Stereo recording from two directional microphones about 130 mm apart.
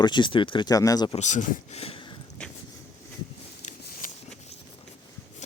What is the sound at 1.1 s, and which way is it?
Speech, 65° left (ahead or behind).